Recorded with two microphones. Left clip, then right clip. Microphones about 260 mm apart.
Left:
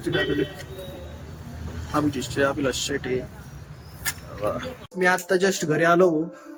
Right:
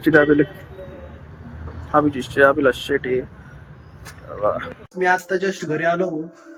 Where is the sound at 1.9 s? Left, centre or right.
Centre.